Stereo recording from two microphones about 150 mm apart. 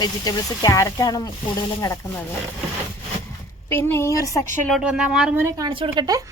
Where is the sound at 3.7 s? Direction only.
15° left (ahead or behind).